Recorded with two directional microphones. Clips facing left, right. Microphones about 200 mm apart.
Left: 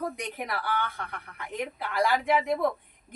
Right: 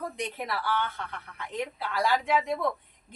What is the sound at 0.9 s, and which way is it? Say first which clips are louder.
A woman's voice: even; 15° left (ahead or behind).